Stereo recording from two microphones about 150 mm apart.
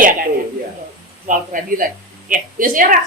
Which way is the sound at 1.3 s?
60° right (ahead or behind).